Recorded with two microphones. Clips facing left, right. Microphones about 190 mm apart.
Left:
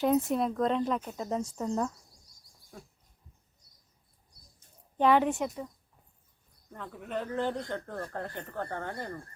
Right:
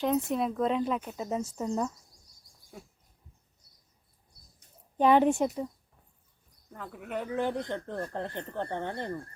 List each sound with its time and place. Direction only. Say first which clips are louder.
0.0 s speech: left 1 dB; centre (ahead or behind)
4.9 s speech: right 2 dB; 20° right (ahead or behind)
5.2 s speech: right 5 dB; 30° right (ahead or behind)
6.7 s speech: even; 5° right (ahead or behind); by 9.1 s 25° right (ahead or behind)